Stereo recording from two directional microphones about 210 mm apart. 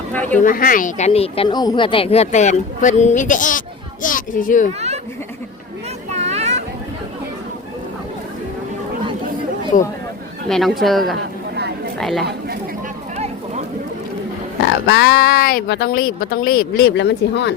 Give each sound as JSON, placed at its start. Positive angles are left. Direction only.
{"t": 0.1, "sound": "speech", "side_deg": 5}
{"t": 0.4, "sound": "a child's voice", "side_deg": 40}
{"t": 6.1, "sound": "a sound", "side_deg": -30}
{"t": 9.7, "sound": "speech", "side_deg": 35}
{"t": 10.5, "sound": "a woman's voice", "side_deg": 0}
{"t": 13.1, "sound": "a sound", "side_deg": -30}
{"t": 14.8, "sound": "speech", "side_deg": 50}